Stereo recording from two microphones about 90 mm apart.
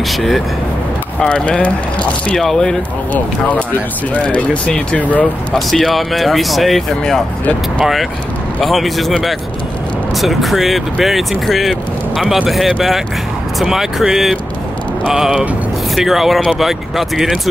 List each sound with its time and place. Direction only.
0.1 s speech: centre (ahead or behind)
3.1 s speech: 15° left (ahead or behind)
5.7 s speech: centre (ahead or behind)